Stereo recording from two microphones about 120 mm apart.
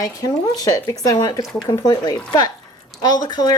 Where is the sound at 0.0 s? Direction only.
30° left (ahead or behind).